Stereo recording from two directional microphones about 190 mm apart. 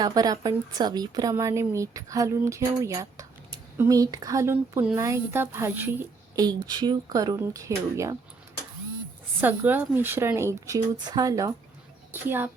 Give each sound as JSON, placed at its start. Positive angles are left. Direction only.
{"t": 0.0, "sound": "a woman's voice", "side_deg": -20}
{"t": 9.4, "sound": "a woman's voice", "side_deg": -10}